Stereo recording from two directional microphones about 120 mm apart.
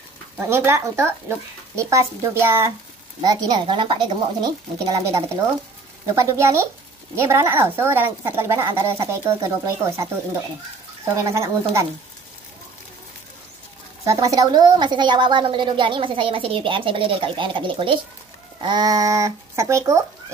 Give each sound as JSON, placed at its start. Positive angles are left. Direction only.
{"t": 0.4, "sound": "a woman's voice", "side_deg": -20}
{"t": 3.3, "sound": "a woman's voice", "side_deg": -35}
{"t": 11.2, "sound": "a woman's voice", "side_deg": -25}
{"t": 14.0, "sound": "a woman's voice", "side_deg": -30}